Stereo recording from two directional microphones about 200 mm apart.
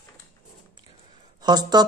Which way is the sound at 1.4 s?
20° right (ahead or behind).